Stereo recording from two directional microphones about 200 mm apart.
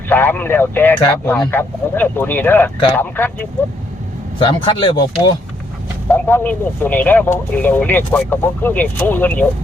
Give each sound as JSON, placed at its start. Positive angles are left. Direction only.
{"t": 0.1, "sound": "speech", "side_deg": 10}
{"t": 4.4, "sound": "speech", "side_deg": 25}
{"t": 6.1, "sound": "speech", "side_deg": 10}